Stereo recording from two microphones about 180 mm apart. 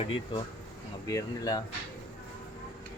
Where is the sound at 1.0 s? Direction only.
20° left (ahead or behind).